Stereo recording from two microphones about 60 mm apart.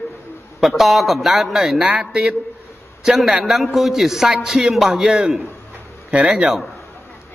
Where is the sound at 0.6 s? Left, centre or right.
Centre.